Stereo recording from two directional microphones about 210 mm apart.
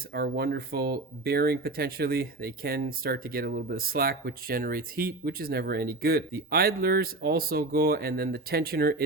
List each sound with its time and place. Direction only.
0.1 s speech: 50° right (ahead or behind)